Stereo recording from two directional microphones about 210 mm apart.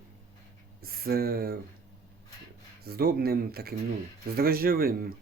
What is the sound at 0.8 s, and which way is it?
Speech, 45° right (ahead or behind).